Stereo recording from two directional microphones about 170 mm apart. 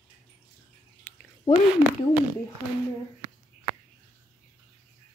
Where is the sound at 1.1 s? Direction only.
10° left (ahead or behind).